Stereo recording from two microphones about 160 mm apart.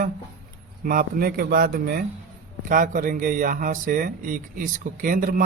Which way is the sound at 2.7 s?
55° right (ahead or behind).